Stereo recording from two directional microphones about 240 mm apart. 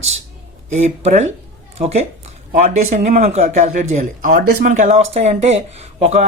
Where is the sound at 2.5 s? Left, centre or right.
Right.